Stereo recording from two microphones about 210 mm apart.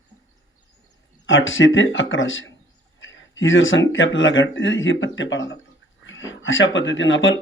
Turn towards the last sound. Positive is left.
turn(degrees=65)  # may be behind; listen again after turning